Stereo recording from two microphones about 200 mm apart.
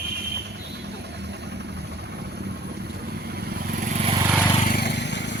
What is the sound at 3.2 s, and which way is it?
Vehicle, 50° right (ahead or behind).